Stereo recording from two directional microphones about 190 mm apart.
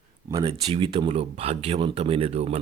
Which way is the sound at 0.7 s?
30° right (ahead or behind).